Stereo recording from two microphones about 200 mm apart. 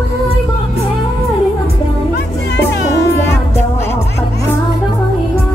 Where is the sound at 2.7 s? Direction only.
60° left (ahead or behind).